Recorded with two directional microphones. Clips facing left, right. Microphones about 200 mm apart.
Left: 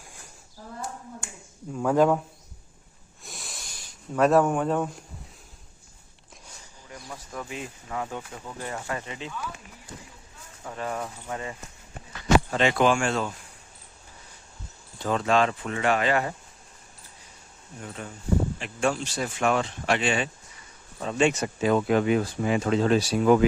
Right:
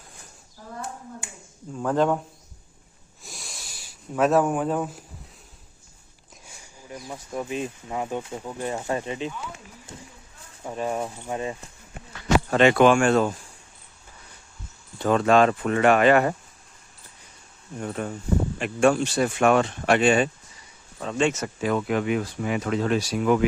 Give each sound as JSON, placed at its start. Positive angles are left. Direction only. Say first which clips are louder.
{"t": 1.8, "sound": "speech", "louder": "left 1 dB", "side_deg": 5}
{"t": 3.2, "sound": "a sound", "louder": "even", "side_deg": 0}
{"t": 6.9, "sound": "speech", "louder": "right 6 dB", "side_deg": -20}
{"t": 12.5, "sound": "speech", "louder": "right 5 dB", "side_deg": -65}
{"t": 14.9, "sound": "speech", "louder": "right 5 dB", "side_deg": -60}
{"t": 17.7, "sound": "speech", "louder": "right 8 dB", "side_deg": -55}
{"t": 21.0, "sound": "speech", "louder": "even", "side_deg": 5}
{"t": 21.2, "sound": "speech", "louder": "left 4 dB", "side_deg": 20}